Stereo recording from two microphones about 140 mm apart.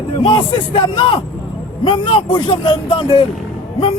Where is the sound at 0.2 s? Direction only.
35° left (ahead or behind).